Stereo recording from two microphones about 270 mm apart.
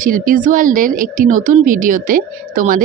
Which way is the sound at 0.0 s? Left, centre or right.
Right.